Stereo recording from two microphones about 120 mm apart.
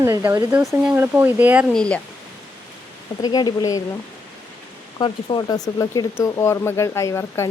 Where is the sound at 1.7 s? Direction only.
10° left (ahead or behind).